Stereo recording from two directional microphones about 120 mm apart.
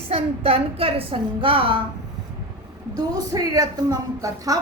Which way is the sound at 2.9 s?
30° right (ahead or behind).